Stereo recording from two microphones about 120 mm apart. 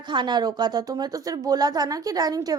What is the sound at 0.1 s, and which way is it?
A woman's voice, 40° right (ahead or behind).